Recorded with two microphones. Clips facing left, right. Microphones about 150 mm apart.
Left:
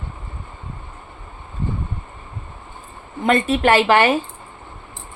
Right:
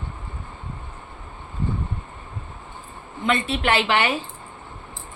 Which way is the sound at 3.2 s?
45° left (ahead or behind).